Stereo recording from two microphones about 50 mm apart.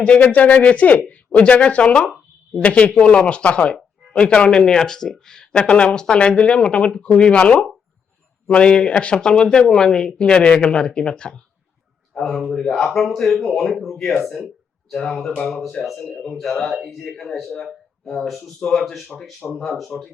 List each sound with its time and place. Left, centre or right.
0.2 s speech: left
4.5 s speech: centre
12.1 s a man's voice: centre
18.6 s speech: centre
19.5 s a man's voice: centre